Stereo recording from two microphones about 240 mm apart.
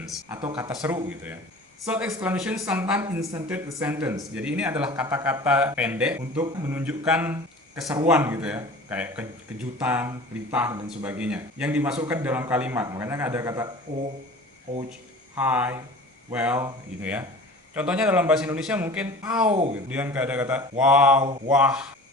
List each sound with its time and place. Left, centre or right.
0.5 s a man's voice: centre
15.4 s a man's voice: centre
19.5 s speech: right
19.7 s a man's voice: centre